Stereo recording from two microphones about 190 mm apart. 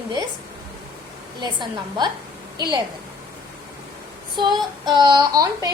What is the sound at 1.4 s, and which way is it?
Speech, 25° right (ahead or behind).